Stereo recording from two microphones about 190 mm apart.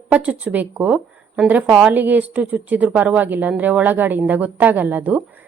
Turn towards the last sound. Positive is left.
turn(degrees=-10)  # may be behind; listen again after turning